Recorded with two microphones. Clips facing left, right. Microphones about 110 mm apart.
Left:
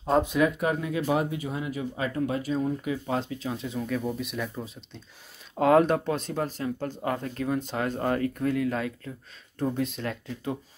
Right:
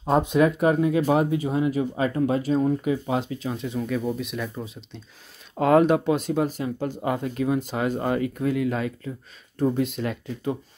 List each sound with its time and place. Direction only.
0.3 s speech: 30° right (ahead or behind)
3.1 s speech: 5° right (ahead or behind)